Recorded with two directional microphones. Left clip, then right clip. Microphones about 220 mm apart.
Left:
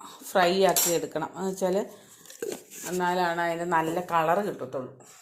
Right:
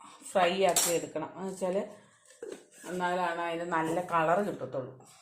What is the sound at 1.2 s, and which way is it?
Speech, 40° left (ahead or behind).